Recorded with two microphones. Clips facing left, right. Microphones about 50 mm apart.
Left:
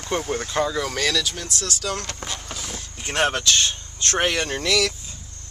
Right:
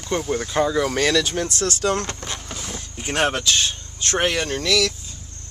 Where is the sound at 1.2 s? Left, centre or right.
Right.